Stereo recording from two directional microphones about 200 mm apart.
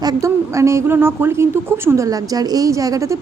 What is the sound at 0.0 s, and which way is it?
A woman's voice, 15° right (ahead or behind).